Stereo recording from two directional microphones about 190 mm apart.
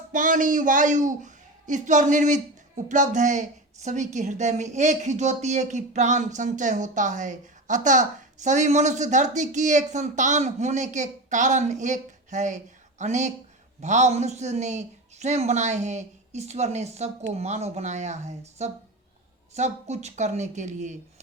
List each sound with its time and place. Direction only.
0.1 s a woman's voice: 45° right (ahead or behind)